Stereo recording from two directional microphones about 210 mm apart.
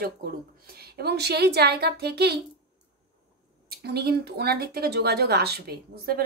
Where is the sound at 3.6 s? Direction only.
50° right (ahead or behind).